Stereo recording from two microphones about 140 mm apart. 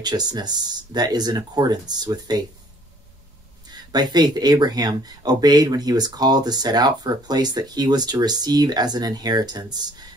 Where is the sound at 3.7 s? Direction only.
30° right (ahead or behind).